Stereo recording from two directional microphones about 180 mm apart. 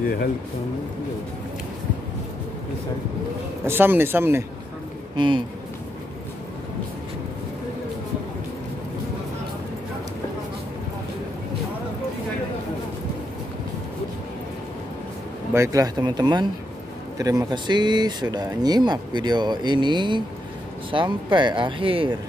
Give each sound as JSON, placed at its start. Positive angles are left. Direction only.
{"t": 3.6, "sound": "speech", "side_deg": -10}
{"t": 5.1, "sound": "speech", "side_deg": -25}
{"t": 15.5, "sound": "speech", "side_deg": -15}